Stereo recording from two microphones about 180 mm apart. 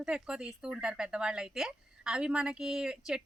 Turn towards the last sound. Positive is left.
turn(degrees=-5)  # may be behind; listen again after turning